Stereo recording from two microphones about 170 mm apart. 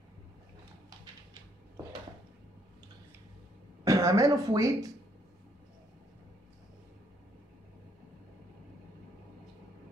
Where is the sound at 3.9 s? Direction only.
20° right (ahead or behind).